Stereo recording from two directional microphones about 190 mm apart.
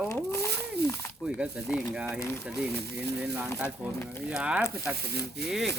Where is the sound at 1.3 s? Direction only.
5° right (ahead or behind).